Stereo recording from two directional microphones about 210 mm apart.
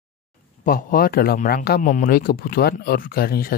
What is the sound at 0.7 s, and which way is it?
A man's voice, 45° left (ahead or behind).